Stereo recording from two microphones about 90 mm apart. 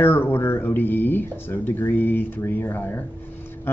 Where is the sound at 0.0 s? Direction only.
25° left (ahead or behind).